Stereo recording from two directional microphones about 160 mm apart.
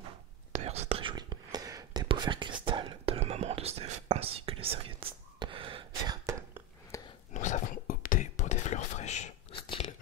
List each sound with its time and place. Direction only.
0.5 s whispering: 40° right (ahead or behind)
6.9 s whispering: 20° left (ahead or behind)
7.3 s whispering: 50° left (ahead or behind)
9.7 s crunch: 35° left (ahead or behind)